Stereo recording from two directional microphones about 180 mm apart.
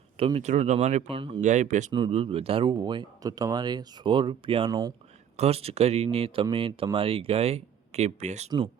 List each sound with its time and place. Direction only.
0.2 s speech: 35° right (ahead or behind)
1.4 s speech: 40° right (ahead or behind)
1.9 s speech: 30° right (ahead or behind)
4.7 s speech: 20° right (ahead or behind)
5.4 s speech: 35° right (ahead or behind)